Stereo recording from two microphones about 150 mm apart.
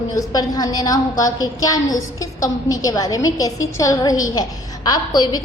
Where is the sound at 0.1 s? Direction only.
25° left (ahead or behind).